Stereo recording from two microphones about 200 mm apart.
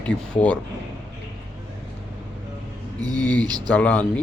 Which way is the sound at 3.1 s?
5° left (ahead or behind).